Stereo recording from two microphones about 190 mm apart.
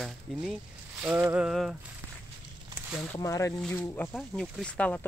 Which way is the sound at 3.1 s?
15° left (ahead or behind).